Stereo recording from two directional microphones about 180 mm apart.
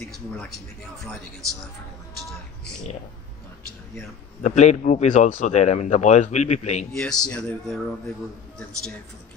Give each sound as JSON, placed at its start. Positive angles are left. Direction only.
{"t": 0.0, "sound": "speech", "side_deg": 0}
{"t": 4.4, "sound": "speech", "side_deg": 40}
{"t": 6.9, "sound": "speech", "side_deg": 5}